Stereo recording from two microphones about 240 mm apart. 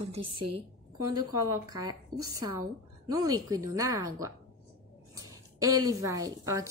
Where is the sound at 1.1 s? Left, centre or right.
Centre.